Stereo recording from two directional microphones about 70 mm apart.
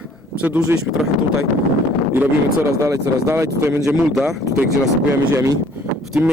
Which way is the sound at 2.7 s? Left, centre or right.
Right.